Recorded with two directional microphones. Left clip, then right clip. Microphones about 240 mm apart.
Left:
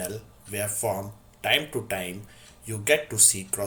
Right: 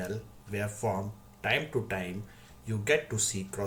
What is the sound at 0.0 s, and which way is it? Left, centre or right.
Speech, centre.